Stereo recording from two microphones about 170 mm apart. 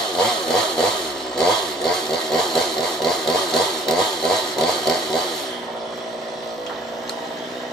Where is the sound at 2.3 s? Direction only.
Centre (ahead or behind).